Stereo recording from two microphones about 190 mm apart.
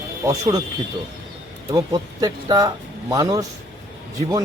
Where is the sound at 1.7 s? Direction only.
20° right (ahead or behind).